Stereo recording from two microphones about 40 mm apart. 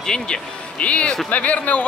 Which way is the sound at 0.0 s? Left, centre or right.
Centre.